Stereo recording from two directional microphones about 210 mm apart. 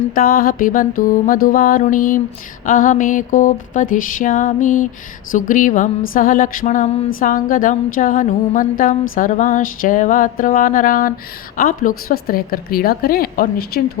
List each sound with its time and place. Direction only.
0.1 s mantra: 45° left (ahead or behind)
11.5 s a woman's voice: 40° left (ahead or behind)